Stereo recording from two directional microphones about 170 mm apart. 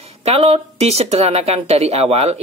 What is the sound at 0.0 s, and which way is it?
Speech, 40° right (ahead or behind).